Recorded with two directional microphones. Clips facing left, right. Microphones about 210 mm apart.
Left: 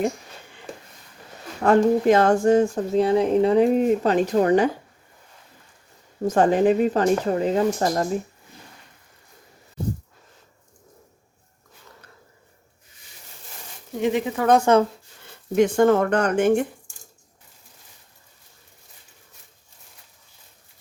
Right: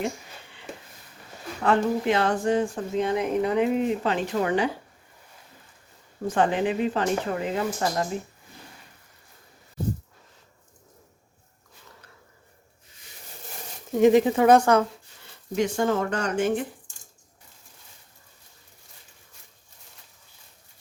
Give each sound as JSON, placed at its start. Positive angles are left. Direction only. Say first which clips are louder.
{"t": 1.6, "sound": "speech", "louder": "left 6 dB", "side_deg": 45}
{"t": 6.2, "sound": "speech", "louder": "left 6 dB", "side_deg": 40}
{"t": 14.0, "sound": "speech", "louder": "right 5 dB", "side_deg": -40}
{"t": 14.6, "sound": "speech", "louder": "left 3 dB", "side_deg": 25}
{"t": 15.5, "sound": "speech", "louder": "left 7 dB", "side_deg": 55}